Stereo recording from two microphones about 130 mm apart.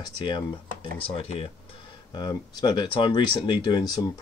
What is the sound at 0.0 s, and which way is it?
Speech, 40° left (ahead or behind).